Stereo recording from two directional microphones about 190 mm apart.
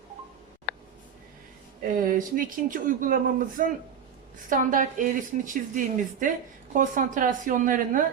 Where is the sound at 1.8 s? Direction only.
45° right (ahead or behind).